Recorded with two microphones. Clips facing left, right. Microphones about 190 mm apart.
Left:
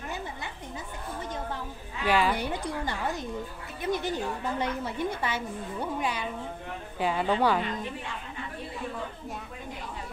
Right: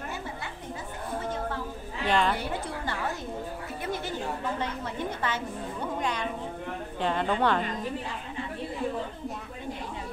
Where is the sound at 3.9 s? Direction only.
15° left (ahead or behind).